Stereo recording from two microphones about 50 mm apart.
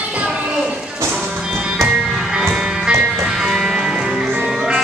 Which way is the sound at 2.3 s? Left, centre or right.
Centre.